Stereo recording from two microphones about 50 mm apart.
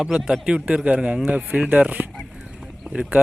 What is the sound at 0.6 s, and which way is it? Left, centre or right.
Speech, right.